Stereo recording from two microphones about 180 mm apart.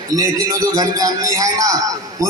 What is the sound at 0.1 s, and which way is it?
A man's voice, 20° right (ahead or behind).